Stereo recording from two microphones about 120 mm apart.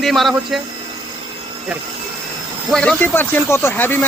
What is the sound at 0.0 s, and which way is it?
Speech, centre (ahead or behind).